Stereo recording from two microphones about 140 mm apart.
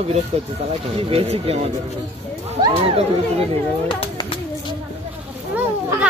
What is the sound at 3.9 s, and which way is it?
Bird, 35° left (ahead or behind).